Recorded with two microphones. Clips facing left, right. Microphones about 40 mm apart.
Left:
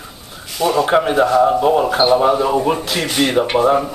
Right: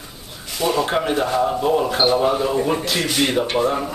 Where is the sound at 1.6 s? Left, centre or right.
Centre.